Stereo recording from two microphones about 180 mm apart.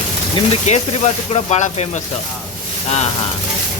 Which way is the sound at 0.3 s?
35° left (ahead or behind).